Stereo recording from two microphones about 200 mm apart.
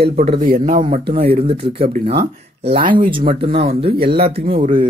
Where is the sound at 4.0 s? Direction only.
50° right (ahead or behind).